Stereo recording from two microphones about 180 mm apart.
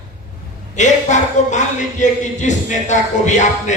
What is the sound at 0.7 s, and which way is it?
Speech, 40° left (ahead or behind).